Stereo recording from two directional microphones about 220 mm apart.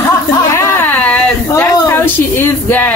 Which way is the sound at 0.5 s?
10° left (ahead or behind).